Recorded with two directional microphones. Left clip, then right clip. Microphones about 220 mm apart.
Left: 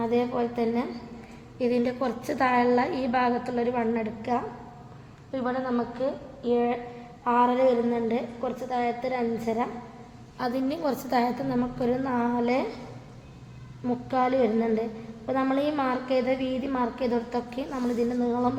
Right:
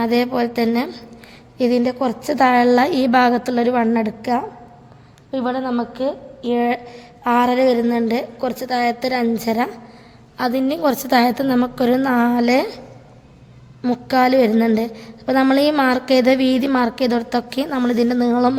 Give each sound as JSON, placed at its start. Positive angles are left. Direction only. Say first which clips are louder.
{"t": 0.0, "sound": "a woman's voice", "louder": "right 8 dB", "side_deg": -55}
{"t": 10.3, "sound": "a woman's voice", "louder": "right 9 dB", "side_deg": -40}
{"t": 13.8, "sound": "a woman's voice", "louder": "right 9 dB", "side_deg": -55}